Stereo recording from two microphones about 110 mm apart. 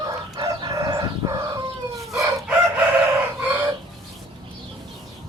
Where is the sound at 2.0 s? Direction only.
Centre (ahead or behind).